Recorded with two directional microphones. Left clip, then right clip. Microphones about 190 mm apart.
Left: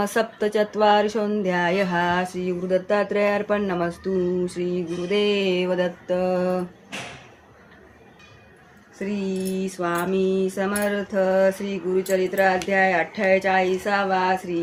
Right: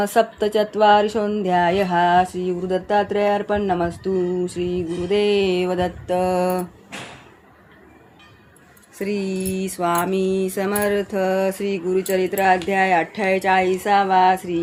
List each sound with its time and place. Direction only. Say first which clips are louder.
0.0 s speech: right 4 dB; 30° right (ahead or behind); by 6.6 s 45° right (ahead or behind)
9.0 s mantra: right 3 dB; 50° right (ahead or behind)